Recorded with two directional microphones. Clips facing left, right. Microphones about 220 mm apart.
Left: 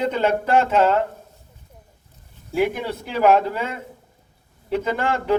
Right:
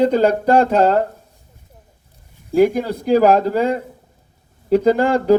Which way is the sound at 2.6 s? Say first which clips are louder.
Right 7 dB; 40° right (ahead or behind).